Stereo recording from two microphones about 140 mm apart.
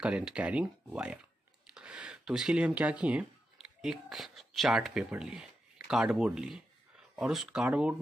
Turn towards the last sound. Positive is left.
turn(degrees=-10)  # may be behind; listen again after turning